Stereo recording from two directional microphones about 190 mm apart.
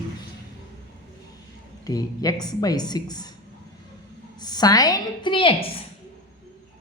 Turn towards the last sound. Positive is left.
turn(degrees=30)  # may be behind; listen again after turning